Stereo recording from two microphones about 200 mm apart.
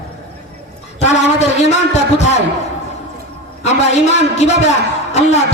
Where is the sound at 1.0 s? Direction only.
35° left (ahead or behind).